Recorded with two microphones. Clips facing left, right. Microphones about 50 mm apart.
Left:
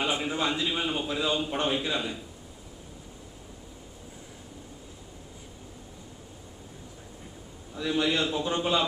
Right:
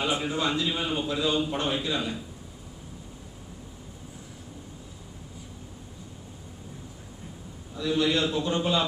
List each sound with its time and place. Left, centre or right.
0.0 s a man's voice: centre
7.7 s a man's voice: centre